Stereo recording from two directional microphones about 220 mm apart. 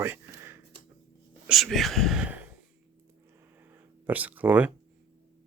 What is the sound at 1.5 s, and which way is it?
Speech, centre (ahead or behind).